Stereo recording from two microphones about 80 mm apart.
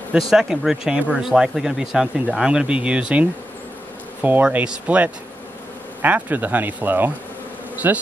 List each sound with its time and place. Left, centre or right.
0.1 s speech: centre; by 7.1 s right
7.7 s bee: right